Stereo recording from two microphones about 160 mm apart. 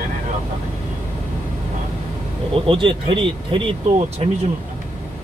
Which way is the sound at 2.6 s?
35° right (ahead or behind).